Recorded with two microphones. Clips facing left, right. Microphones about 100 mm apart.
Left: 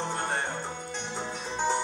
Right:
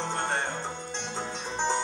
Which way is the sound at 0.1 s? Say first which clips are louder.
Right 1 dB; 10° left (ahead or behind).